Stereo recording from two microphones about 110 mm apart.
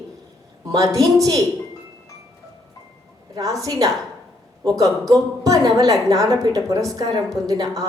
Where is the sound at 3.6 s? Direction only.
35° right (ahead or behind).